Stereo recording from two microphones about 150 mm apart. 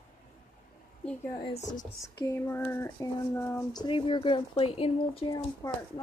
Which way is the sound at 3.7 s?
30° left (ahead or behind).